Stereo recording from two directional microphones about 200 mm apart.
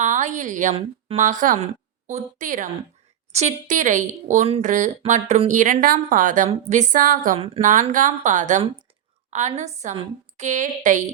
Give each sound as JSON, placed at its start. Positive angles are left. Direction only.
{"t": 0.0, "sound": "a woman's voice", "side_deg": -40}
{"t": 7.3, "sound": "speech", "side_deg": -30}
{"t": 7.7, "sound": "a woman's voice", "side_deg": -40}